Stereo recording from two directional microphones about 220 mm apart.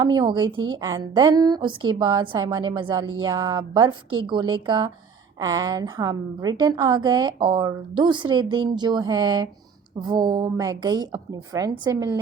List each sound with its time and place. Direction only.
0.0 s a woman's voice: 20° right (ahead or behind)